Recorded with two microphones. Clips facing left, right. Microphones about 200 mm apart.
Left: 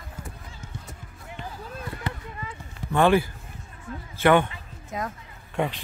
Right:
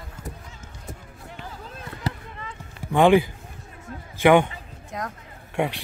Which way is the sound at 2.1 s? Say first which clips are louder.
Right 5 dB; 40° right (ahead or behind).